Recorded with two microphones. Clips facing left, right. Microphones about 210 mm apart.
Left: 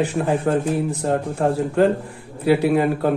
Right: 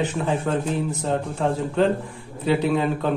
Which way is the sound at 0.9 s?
60° left (ahead or behind).